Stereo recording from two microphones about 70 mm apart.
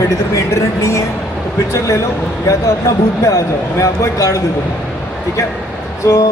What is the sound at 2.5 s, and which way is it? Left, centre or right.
Speech, left.